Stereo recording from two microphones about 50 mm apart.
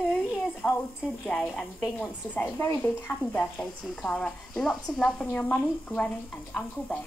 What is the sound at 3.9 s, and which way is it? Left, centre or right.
A woman's voice, centre.